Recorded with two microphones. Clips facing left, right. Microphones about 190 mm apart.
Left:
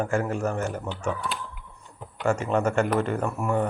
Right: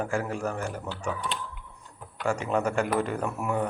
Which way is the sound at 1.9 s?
20° left (ahead or behind).